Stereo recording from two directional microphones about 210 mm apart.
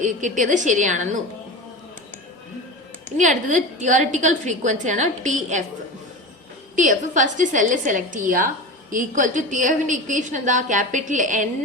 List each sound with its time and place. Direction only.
0.0 s a woman's voice: 35° right (ahead or behind)
3.2 s a woman's voice: 35° right (ahead or behind)
6.7 s a woman's voice: 35° right (ahead or behind)